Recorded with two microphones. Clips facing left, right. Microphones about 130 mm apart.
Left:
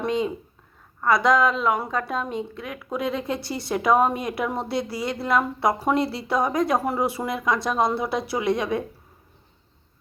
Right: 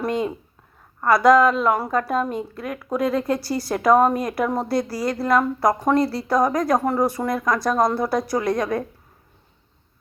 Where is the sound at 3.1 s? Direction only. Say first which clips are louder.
Right 6 dB; 45° right (ahead or behind).